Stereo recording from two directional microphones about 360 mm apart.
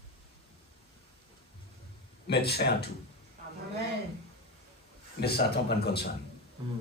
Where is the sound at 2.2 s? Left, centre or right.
Left.